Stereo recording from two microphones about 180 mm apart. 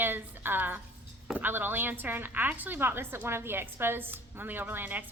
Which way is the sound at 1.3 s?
10° right (ahead or behind).